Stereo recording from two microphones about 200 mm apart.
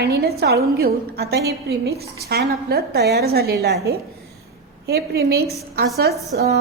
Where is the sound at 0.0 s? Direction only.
50° right (ahead or behind).